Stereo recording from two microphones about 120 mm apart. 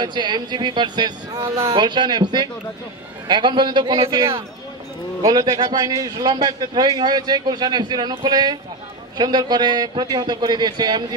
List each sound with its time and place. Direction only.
0.0 s a man's voice: 40° right (ahead or behind)
5.2 s a man's voice: 35° right (ahead or behind)